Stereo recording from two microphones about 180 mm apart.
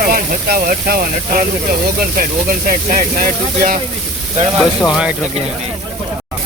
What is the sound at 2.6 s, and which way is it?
Speech, 50° right (ahead or behind).